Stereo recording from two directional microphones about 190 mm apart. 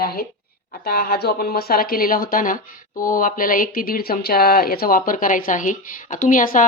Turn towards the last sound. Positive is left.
turn(degrees=45)  # may be behind; listen again after turning